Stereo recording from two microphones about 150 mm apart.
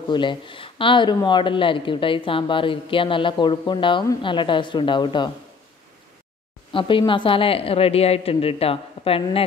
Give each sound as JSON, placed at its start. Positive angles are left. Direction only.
{"t": 0.1, "sound": "speech", "side_deg": 30}
{"t": 6.7, "sound": "speech", "side_deg": 35}